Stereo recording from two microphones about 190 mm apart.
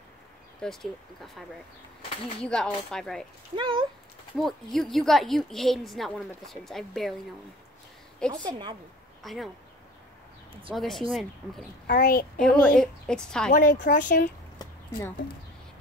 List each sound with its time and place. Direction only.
0.6 s a woman's voice: 5° left (ahead or behind)
2.4 s a woman's voice: 5° left (ahead or behind)
3.5 s a woman's voice: 25° right (ahead or behind)
4.4 s a woman's voice: centre (ahead or behind)
8.3 s a woman's voice: 25° right (ahead or behind)
9.2 s speech: centre (ahead or behind)
10.7 s a woman's voice: centre (ahead or behind)
11.9 s speech: 50° left (ahead or behind)
12.4 s a woman's voice: 5° left (ahead or behind)
13.5 s speech: 45° left (ahead or behind)